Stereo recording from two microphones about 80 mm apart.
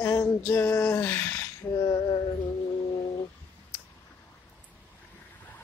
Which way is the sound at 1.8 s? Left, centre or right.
Left.